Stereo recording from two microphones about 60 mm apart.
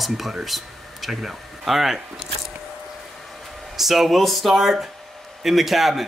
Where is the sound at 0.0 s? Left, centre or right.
Centre.